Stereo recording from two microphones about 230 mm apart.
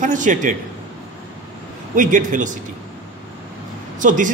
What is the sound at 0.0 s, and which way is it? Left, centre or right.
Speech, right.